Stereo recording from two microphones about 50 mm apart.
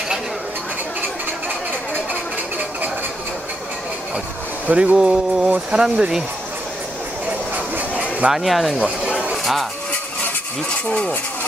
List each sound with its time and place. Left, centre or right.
4.6 s speech: right
4.9 s speech: centre
8.3 s speech: centre
9.4 s a sound: centre
10.9 s speech: left